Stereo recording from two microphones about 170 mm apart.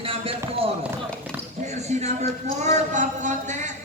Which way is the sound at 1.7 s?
40° right (ahead or behind).